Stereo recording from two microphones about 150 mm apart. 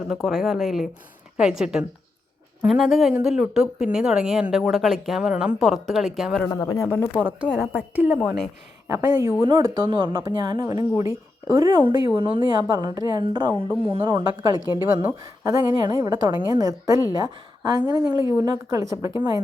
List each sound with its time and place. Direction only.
0.3 s speech: centre (ahead or behind)
6.5 s speech: 20° left (ahead or behind)
7.4 s a woman's voice: 5° right (ahead or behind); by 11.8 s 25° right (ahead or behind)
12.1 s a woman's voice: 35° right (ahead or behind)
13.5 s a woman's voice: 10° right (ahead or behind)
13.9 s a woman's voice: 35° right (ahead or behind)